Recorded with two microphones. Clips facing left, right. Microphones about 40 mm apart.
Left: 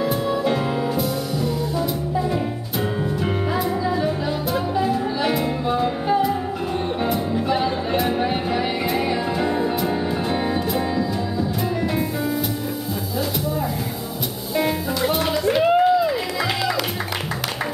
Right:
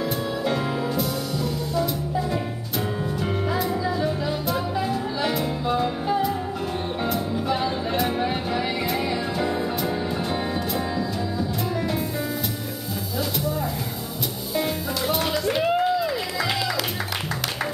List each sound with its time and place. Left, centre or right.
0.0 s music: centre
7.0 s music: centre
14.5 s music: centre